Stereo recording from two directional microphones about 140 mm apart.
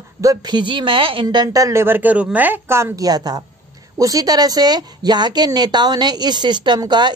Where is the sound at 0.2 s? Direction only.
30° right (ahead or behind).